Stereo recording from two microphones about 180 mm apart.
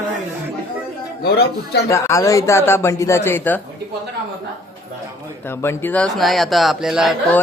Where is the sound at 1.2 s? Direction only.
65° left (ahead or behind).